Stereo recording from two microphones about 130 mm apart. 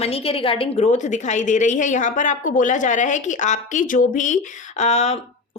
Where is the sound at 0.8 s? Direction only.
65° left (ahead or behind).